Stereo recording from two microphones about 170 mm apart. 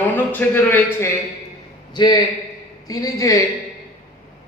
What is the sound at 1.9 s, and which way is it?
A man's voice, 25° left (ahead or behind).